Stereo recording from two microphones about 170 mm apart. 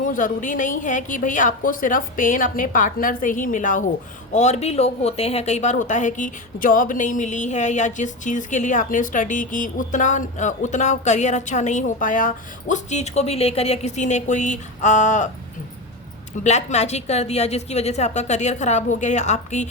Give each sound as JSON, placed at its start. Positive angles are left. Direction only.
{"t": 0.0, "sound": "speech", "side_deg": 50}
{"t": 16.4, "sound": "speech", "side_deg": 45}